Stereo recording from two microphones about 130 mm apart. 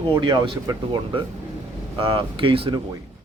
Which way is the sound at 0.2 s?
35° right (ahead or behind).